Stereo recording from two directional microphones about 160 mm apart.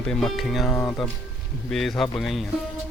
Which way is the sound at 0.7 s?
10° left (ahead or behind).